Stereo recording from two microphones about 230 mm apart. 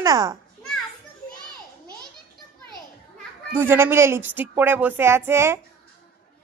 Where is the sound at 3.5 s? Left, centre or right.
Centre.